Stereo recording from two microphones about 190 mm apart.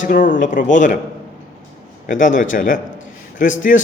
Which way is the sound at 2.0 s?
45° left (ahead or behind).